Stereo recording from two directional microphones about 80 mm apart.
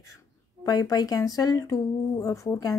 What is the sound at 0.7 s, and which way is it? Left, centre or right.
Speech, left.